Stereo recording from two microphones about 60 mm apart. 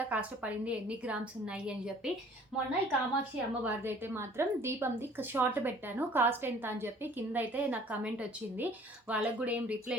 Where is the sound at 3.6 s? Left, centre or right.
Right.